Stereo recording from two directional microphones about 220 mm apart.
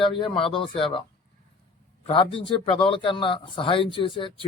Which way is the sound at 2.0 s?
25° left (ahead or behind).